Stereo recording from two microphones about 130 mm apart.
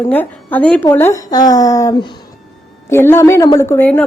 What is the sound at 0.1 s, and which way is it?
A woman's voice, 10° left (ahead or behind).